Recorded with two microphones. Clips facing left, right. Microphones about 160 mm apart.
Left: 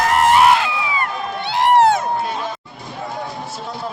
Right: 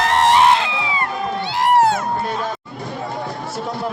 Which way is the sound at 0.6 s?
25° right (ahead or behind).